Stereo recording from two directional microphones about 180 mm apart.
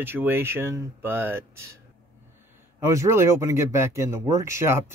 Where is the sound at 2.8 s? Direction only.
15° right (ahead or behind).